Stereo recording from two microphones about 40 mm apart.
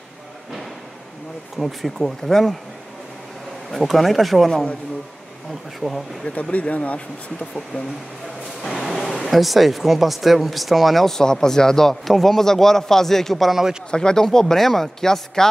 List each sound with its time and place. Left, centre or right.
1.6 s speech: centre
3.7 s speech: centre
5.8 s speech: centre
6.2 s speech: left
8.6 s a sound: centre
9.2 s speech: centre
11.1 s speech: centre
13.8 s speech: left